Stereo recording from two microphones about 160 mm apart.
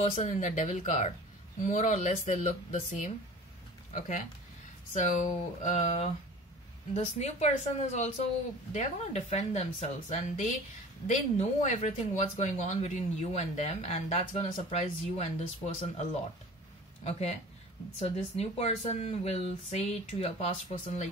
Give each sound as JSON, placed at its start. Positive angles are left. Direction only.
{"t": 0.0, "sound": "speech", "side_deg": 50}
{"t": 4.9, "sound": "speech", "side_deg": 50}